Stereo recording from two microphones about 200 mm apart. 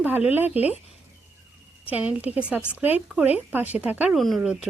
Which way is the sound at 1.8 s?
5° right (ahead or behind).